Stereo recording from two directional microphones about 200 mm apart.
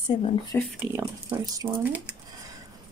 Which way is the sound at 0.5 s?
10° left (ahead or behind).